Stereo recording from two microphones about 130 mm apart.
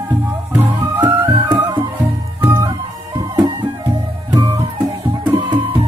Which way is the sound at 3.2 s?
25° right (ahead or behind).